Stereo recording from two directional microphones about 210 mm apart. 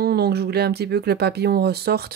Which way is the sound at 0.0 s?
50° right (ahead or behind).